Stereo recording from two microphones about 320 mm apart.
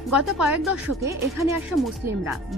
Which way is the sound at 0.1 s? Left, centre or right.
Centre.